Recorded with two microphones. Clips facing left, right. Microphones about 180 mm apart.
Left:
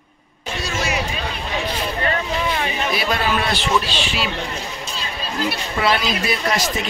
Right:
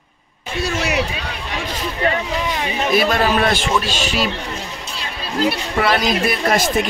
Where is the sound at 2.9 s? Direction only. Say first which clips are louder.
Right 7 dB; 50° right (ahead or behind).